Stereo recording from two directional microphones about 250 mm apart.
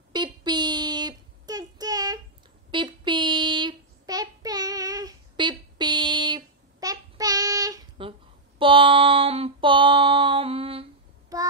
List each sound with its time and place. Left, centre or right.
0.1 s child singing: centre